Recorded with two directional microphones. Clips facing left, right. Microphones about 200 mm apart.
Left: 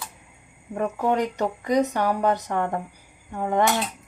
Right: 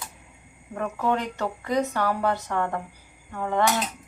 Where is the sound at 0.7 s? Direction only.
15° left (ahead or behind).